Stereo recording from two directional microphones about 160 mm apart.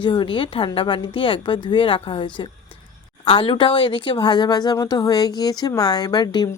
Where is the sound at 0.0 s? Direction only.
30° left (ahead or behind).